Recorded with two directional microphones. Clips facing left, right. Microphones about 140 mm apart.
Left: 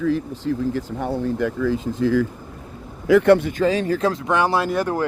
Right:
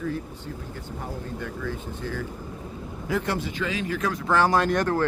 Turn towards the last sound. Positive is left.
turn(degrees=10)  # may be behind; listen again after turning